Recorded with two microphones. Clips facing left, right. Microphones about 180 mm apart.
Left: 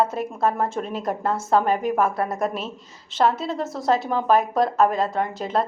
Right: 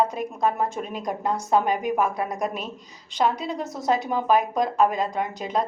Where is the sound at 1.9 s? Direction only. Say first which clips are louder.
Left 2 dB; 15° right (ahead or behind).